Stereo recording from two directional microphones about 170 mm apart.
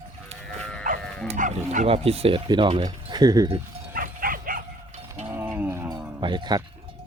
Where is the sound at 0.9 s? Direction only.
50° right (ahead or behind).